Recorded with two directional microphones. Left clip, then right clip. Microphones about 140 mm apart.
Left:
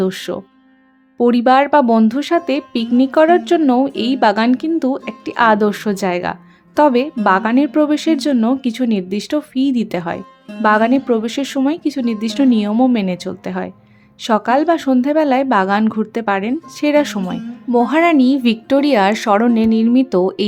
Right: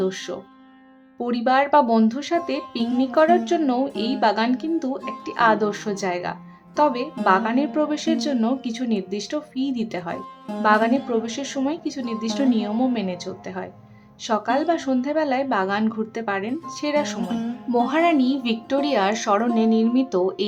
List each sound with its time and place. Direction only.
0.0 s speech: 40° left (ahead or behind)
17.7 s speech: 35° left (ahead or behind)